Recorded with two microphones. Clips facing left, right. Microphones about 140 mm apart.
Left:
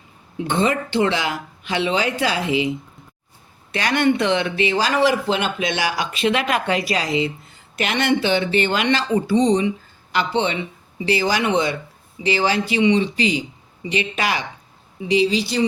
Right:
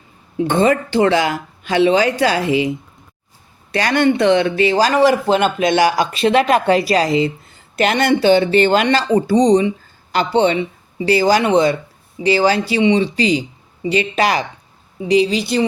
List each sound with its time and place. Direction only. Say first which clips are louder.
0.3 s speech: right 6 dB; 40° right (ahead or behind)
3.7 s speech: right 3 dB; 40° right (ahead or behind); by 15.6 s 55° right (ahead or behind)